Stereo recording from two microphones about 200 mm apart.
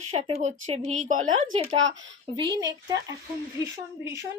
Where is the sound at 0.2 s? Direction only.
35° right (ahead or behind).